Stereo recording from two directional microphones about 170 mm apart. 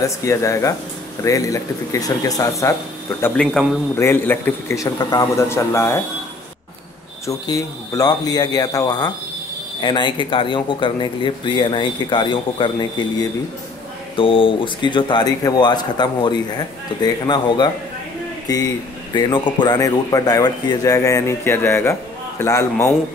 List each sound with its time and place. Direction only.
0.0 s a man's voice: 20° left (ahead or behind)
7.2 s a man's voice: 20° left (ahead or behind)